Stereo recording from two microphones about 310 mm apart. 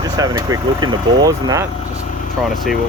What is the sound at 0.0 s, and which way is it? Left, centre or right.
Speech, centre.